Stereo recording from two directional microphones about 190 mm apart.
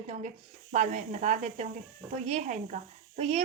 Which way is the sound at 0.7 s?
40° right (ahead or behind).